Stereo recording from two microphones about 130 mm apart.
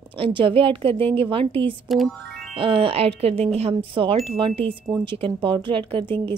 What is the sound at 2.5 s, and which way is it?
A woman's voice, 40° right (ahead or behind).